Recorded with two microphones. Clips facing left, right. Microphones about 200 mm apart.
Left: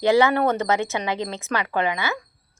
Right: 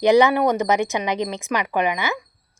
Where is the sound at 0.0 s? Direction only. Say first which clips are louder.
Right 3 dB; 20° right (ahead or behind).